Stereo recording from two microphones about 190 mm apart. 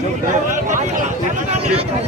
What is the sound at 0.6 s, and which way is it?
A man's voice, 40° right (ahead or behind).